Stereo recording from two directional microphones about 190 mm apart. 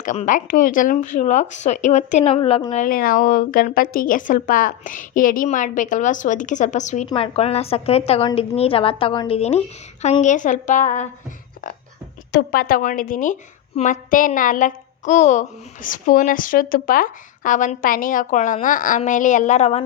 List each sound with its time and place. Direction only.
0.0 s speech: 40° left (ahead or behind)
2.8 s a woman's voice: 50° left (ahead or behind)
12.3 s a woman's voice: 55° left (ahead or behind); by 19.8 s 35° left (ahead or behind)